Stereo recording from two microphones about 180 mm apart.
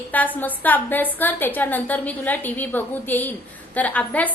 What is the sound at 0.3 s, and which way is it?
A woman's voice, 10° left (ahead or behind).